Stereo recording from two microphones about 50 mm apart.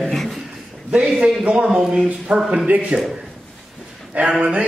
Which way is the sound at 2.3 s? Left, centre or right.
Right.